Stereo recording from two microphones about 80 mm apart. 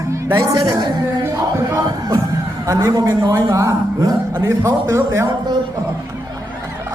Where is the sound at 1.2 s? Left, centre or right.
Right.